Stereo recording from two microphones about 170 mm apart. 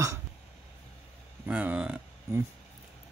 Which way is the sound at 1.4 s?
10° right (ahead or behind).